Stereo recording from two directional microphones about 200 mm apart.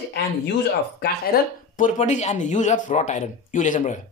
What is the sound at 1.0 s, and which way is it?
Speech, 45° left (ahead or behind).